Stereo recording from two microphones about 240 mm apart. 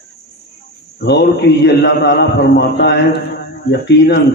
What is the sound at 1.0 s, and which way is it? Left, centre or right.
A man's voice, left.